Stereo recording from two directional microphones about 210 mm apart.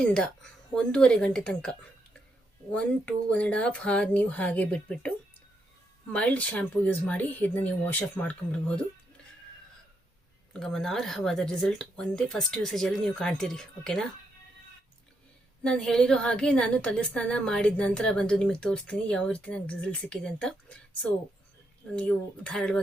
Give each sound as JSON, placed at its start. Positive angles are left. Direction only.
{"t": 0.0, "sound": "a woman's voice", "side_deg": 5}
{"t": 2.7, "sound": "a woman's voice", "side_deg": 5}
{"t": 10.5, "sound": "a woman's voice", "side_deg": 0}
{"t": 15.6, "sound": "a woman's voice", "side_deg": 5}